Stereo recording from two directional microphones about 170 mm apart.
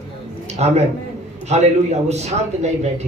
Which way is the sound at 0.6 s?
40° right (ahead or behind).